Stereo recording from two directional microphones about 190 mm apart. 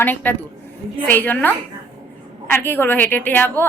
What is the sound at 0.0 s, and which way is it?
A woman's voice, 10° left (ahead or behind).